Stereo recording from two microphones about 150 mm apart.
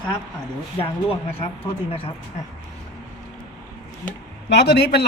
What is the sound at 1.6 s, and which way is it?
Speech, 40° left (ahead or behind).